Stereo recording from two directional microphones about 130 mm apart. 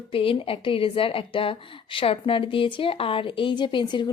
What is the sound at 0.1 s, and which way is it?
A woman's voice, 45° left (ahead or behind).